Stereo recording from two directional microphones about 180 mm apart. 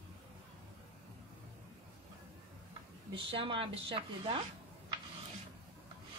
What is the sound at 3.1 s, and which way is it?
Speech, 30° right (ahead or behind).